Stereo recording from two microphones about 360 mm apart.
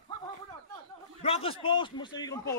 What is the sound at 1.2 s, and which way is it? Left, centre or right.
A man's voice, centre.